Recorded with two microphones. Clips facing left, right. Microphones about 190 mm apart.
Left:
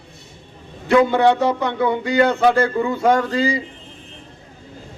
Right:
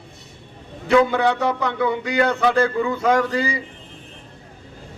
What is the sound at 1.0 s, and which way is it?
Speech, 30° left (ahead or behind).